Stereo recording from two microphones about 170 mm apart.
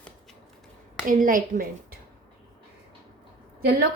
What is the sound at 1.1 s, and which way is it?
Speech, 50° right (ahead or behind).